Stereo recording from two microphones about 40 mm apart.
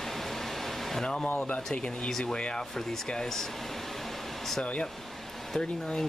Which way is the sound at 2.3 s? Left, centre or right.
Left.